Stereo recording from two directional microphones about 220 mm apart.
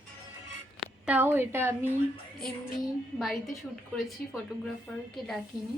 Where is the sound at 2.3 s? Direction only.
Centre (ahead or behind).